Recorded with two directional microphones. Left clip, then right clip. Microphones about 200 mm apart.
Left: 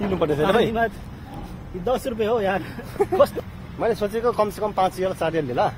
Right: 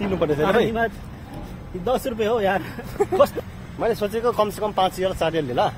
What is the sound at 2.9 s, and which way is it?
A man's voice, centre (ahead or behind).